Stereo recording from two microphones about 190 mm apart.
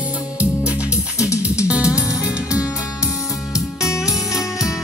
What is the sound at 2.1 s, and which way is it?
Music, 5° right (ahead or behind).